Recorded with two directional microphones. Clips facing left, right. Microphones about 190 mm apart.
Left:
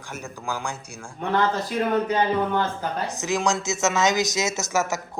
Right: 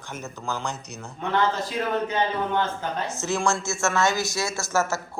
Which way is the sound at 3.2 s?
15° left (ahead or behind).